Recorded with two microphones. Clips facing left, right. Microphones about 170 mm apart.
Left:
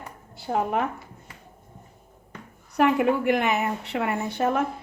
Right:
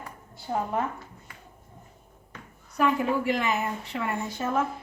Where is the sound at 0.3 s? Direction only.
80° left.